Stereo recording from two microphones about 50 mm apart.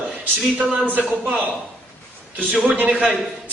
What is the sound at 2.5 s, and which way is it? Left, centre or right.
Speech, right.